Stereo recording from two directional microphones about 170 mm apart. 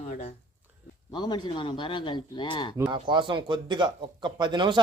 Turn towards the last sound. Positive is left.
turn(degrees=-25)  # may be behind; listen again after turning